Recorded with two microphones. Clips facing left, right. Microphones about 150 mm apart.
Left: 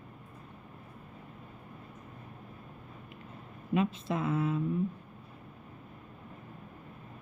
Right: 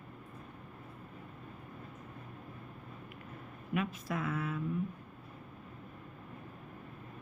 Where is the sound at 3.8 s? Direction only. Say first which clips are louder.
Left 5 dB; 25° left (ahead or behind).